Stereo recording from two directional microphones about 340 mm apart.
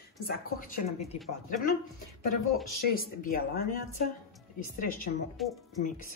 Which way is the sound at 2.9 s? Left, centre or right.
Left.